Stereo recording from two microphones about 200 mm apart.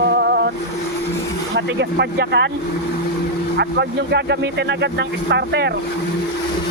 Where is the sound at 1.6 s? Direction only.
60° right (ahead or behind).